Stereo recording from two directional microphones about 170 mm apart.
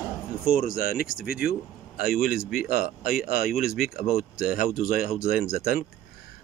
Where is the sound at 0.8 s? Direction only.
60° left (ahead or behind).